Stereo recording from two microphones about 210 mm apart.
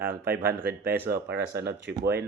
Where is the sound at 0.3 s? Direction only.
45° right (ahead or behind).